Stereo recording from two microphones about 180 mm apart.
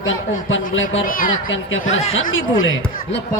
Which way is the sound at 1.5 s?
90° left.